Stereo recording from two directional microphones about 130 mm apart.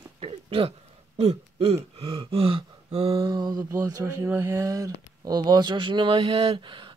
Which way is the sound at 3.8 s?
25° right (ahead or behind).